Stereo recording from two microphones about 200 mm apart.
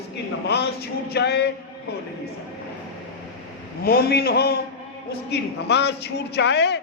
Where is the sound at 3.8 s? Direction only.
50° left (ahead or behind).